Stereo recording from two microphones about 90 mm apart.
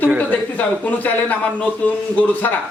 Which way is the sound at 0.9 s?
20° left (ahead or behind).